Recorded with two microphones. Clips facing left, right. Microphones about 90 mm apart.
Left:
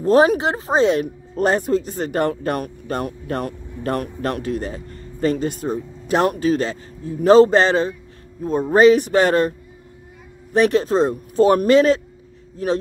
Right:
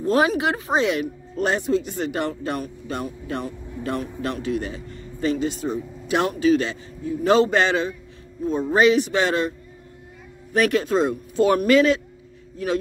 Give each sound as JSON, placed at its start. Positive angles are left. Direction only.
{"t": 0.0, "sound": "speech", "side_deg": 35}
{"t": 10.5, "sound": "a man's voice", "side_deg": 30}